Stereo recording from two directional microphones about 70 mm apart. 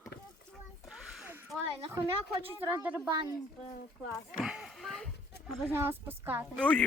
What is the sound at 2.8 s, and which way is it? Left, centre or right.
Speech, right.